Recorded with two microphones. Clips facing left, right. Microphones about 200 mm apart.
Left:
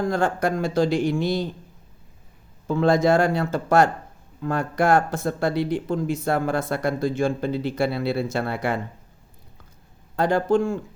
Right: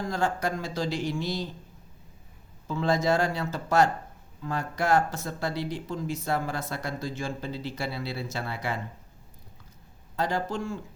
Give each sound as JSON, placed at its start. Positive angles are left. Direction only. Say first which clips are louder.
{"t": 0.0, "sound": "speech", "louder": "left 6 dB", "side_deg": 55}
{"t": 2.6, "sound": "speech", "louder": "left 7 dB", "side_deg": 55}
{"t": 10.2, "sound": "speech", "louder": "left 9 dB", "side_deg": 55}